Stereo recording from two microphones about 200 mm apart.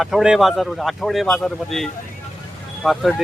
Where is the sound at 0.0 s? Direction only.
Centre (ahead or behind).